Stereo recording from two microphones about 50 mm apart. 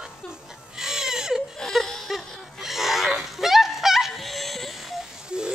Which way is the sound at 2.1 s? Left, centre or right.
Centre.